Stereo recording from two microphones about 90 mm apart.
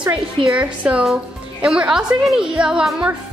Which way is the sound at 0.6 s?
15° right (ahead or behind).